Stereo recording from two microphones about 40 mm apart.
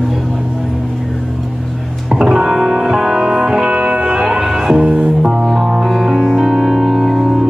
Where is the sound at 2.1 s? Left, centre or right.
Right.